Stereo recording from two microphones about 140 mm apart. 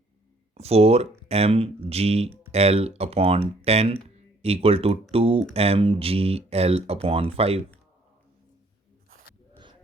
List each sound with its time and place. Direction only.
0.5 s speech: 45° right (ahead or behind)